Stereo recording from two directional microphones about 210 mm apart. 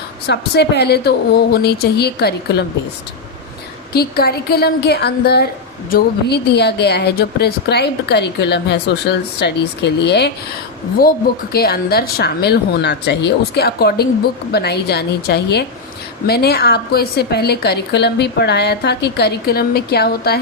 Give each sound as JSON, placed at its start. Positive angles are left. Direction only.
{"t": 0.3, "sound": "a woman's voice", "side_deg": 55}
{"t": 3.9, "sound": "a woman's voice", "side_deg": 45}
{"t": 11.5, "sound": "a woman's voice", "side_deg": 50}